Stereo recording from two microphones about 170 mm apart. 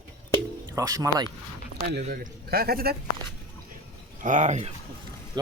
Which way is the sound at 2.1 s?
65° right (ahead or behind).